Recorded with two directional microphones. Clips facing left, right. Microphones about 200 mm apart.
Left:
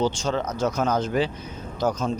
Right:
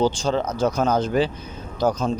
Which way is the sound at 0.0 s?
35° right (ahead or behind).